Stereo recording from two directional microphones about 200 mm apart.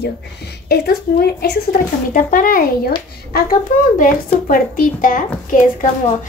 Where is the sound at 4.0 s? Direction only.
40° left (ahead or behind).